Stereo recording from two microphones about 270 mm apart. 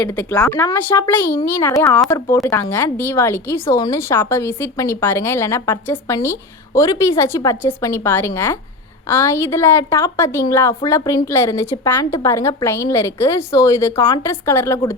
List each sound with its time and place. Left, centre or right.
0.0 s a woman's voice: centre